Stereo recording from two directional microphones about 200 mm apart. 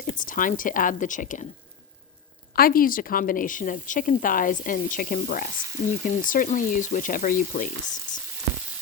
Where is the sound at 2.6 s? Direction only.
45° left (ahead or behind).